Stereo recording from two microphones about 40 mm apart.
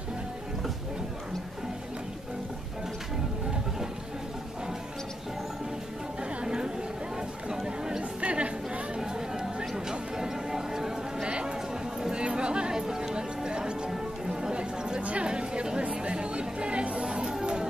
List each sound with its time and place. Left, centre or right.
6.4 s chatter: centre
8.2 s chatter: right
9.0 s music: centre
11.2 s a sound: right
12.0 s music: right